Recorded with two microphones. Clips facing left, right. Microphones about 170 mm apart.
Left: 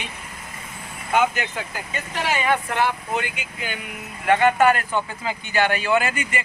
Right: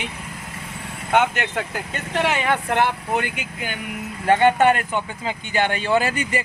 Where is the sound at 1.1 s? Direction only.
70° right (ahead or behind); by 3.8 s 50° right (ahead or behind).